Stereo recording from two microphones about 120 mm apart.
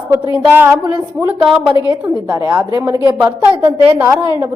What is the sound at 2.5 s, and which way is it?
Speech, 25° right (ahead or behind).